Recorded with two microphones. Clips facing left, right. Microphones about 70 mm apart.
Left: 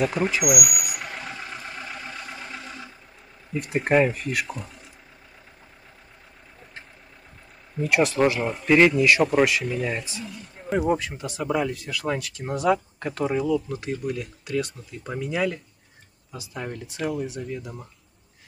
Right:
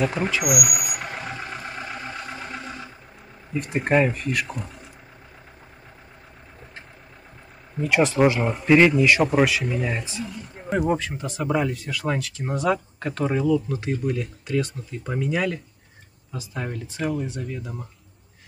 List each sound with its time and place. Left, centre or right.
0.0 s speech: centre
0.4 s vehicle: centre
3.5 s speech: centre
8.2 s speech: centre